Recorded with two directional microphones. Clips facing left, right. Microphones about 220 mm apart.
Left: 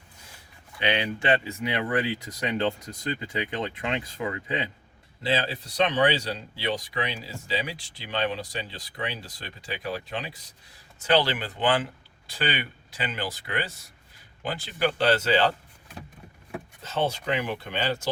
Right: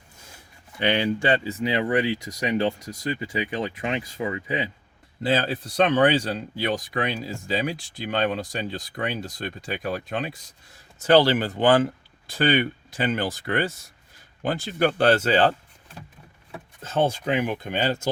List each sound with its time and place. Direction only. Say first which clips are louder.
1.5 s speech: right 4 dB; 20° right (ahead or behind)
5.2 s speech: right 4 dB; 50° right (ahead or behind)
16.8 s speech: right 4 dB; 50° right (ahead or behind)